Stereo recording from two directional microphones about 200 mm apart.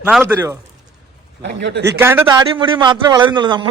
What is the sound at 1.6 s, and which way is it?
Speech, 60° right (ahead or behind).